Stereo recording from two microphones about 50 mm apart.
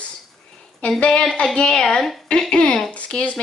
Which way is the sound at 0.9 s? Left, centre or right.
Left.